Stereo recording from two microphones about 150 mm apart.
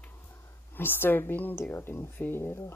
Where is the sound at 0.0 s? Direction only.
15° left (ahead or behind).